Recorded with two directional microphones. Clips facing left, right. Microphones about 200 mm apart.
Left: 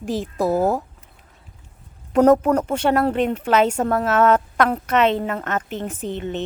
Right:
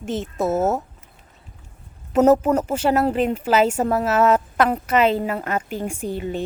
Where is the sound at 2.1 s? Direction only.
5° right (ahead or behind).